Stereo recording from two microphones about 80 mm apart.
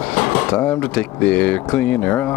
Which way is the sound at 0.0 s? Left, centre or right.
Left.